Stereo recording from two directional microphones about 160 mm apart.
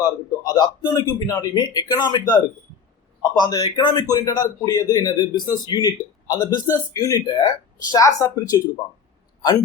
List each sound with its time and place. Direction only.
0.0 s a man's voice: 20° left (ahead or behind)